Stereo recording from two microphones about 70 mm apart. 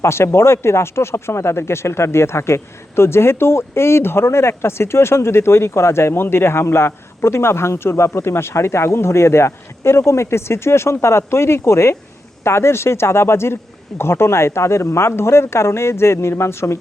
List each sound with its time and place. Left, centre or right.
0.0 s speech: left